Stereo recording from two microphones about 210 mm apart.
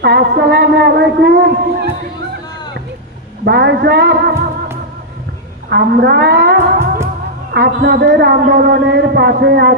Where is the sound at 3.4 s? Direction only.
50° right (ahead or behind).